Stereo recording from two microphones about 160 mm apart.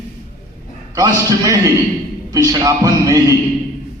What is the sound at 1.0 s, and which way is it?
A man's voice, 20° right (ahead or behind).